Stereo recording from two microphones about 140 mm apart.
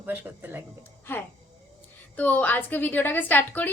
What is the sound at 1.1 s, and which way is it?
A woman's voice, 15° left (ahead or behind).